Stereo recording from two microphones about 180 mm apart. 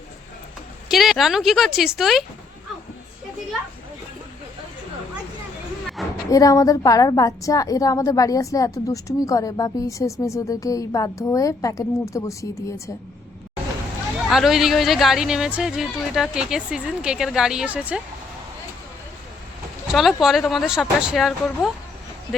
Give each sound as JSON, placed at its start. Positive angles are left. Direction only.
{"t": 0.9, "sound": "speech", "side_deg": 0}
{"t": 6.0, "sound": "a sound", "side_deg": 0}
{"t": 6.3, "sound": "a woman's voice", "side_deg": 20}
{"t": 14.3, "sound": "speech", "side_deg": 0}
{"t": 19.9, "sound": "speech", "side_deg": 0}